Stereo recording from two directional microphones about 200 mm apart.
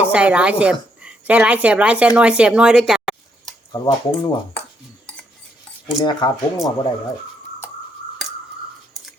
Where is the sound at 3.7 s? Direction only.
20° left (ahead or behind).